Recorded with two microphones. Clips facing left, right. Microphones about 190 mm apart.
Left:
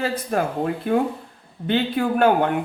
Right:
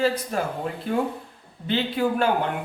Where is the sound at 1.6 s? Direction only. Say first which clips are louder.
Left 2 dB; 55° left (ahead or behind).